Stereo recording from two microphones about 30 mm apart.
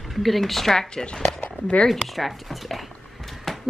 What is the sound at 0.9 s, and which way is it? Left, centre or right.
Speech, left.